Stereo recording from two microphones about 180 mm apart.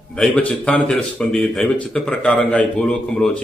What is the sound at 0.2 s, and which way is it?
Speech, 5° left (ahead or behind).